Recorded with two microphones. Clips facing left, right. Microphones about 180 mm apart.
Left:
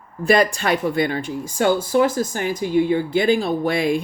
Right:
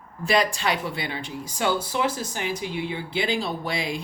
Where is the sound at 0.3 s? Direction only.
50° left (ahead or behind).